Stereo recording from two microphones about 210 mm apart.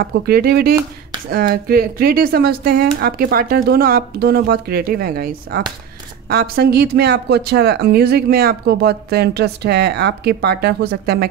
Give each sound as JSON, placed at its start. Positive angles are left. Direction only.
{"t": 0.0, "sound": "speech", "side_deg": -45}